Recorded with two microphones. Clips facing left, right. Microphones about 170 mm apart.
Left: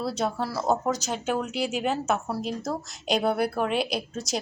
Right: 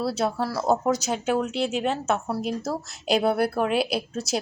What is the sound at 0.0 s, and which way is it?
A woman's voice, 5° right (ahead or behind).